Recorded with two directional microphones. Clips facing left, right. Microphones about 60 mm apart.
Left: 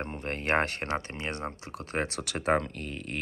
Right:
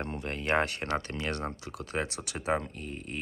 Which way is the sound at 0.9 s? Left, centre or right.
Left.